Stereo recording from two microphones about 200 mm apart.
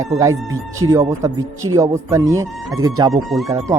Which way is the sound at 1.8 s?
15° right (ahead or behind).